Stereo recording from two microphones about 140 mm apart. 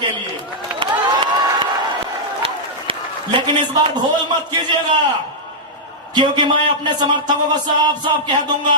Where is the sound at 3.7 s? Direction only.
30° right (ahead or behind).